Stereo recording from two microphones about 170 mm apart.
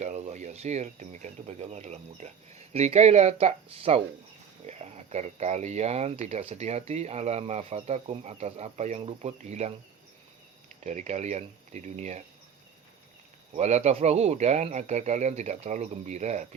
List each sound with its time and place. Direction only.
0.0 s speech: 40° right (ahead or behind)
10.8 s speech: 40° right (ahead or behind)
13.6 s speech: 40° right (ahead or behind)